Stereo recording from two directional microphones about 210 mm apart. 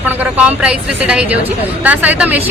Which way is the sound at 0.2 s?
5° right (ahead or behind).